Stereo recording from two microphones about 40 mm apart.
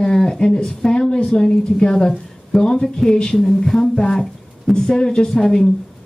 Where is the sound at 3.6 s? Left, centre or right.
Centre.